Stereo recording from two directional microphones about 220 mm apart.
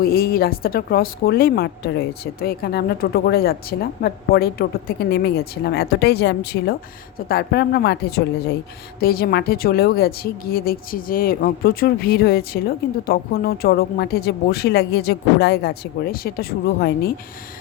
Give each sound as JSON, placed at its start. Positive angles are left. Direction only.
{"t": 0.0, "sound": "a woman's voice", "side_deg": 45}